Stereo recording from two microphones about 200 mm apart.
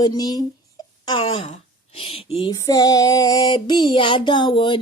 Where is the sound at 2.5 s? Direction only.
15° left (ahead or behind).